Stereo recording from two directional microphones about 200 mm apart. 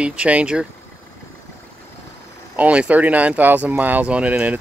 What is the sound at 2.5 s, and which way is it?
Speech, 5° right (ahead or behind).